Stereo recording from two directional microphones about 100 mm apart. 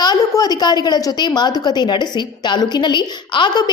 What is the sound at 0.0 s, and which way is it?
A woman's voice, 40° left (ahead or behind).